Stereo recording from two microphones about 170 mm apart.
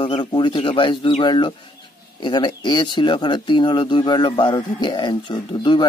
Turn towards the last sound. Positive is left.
turn(degrees=25)  # may be behind; listen again after turning